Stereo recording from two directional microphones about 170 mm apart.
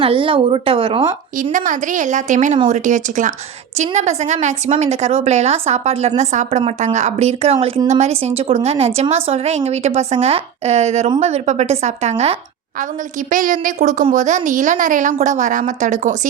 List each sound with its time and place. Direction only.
0.0 s a woman's voice: 30° right (ahead or behind)
1.5 s a woman's voice: 50° right (ahead or behind)
13.3 s a woman's voice: 50° right (ahead or behind)